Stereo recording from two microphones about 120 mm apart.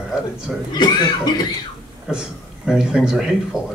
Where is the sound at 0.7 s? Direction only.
35° left (ahead or behind).